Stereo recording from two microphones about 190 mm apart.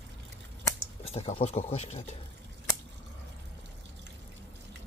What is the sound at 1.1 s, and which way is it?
Speech, 30° left (ahead or behind).